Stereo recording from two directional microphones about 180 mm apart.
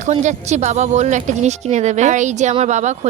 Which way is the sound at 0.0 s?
40° right (ahead or behind).